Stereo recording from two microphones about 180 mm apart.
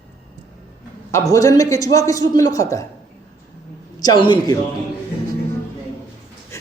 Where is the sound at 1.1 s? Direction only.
20° left (ahead or behind).